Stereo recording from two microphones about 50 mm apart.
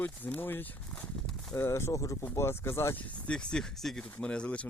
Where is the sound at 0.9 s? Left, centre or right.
Centre.